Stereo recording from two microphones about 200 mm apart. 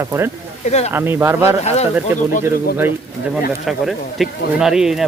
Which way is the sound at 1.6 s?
35° left (ahead or behind).